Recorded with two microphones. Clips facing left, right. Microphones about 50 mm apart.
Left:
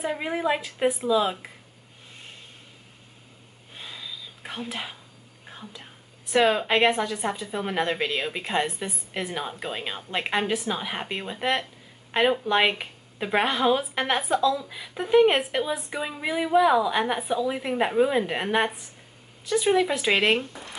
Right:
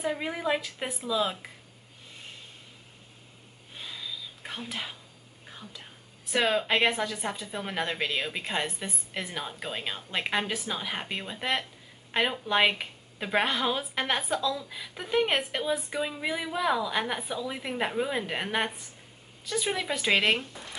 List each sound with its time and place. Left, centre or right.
0.0 s a woman's voice: centre
3.7 s whispering: centre
6.3 s a woman's voice: centre